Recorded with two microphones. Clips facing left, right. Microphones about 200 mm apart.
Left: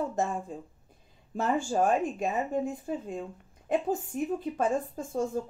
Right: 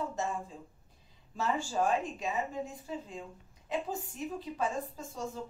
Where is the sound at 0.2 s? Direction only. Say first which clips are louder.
Left 5 dB; 50° left (ahead or behind).